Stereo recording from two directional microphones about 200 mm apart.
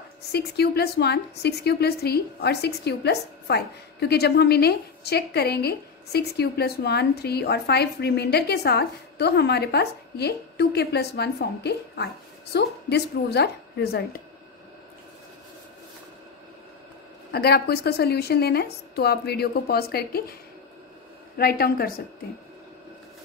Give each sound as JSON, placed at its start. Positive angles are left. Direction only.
{"t": 0.3, "sound": "a woman's voice", "side_deg": 55}
{"t": 17.3, "sound": "a woman's voice", "side_deg": 55}
{"t": 21.4, "sound": "a woman's voice", "side_deg": 50}